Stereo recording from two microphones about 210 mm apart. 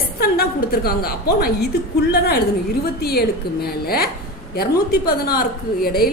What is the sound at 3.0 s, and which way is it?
A woman's voice, 50° left (ahead or behind).